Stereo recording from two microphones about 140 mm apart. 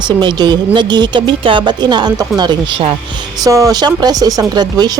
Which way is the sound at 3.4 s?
25° right (ahead or behind).